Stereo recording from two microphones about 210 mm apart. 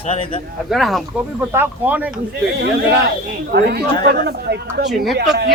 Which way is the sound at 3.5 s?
50° right (ahead or behind).